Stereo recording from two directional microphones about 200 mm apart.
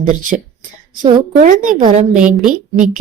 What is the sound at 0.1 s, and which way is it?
A woman's voice, 40° right (ahead or behind).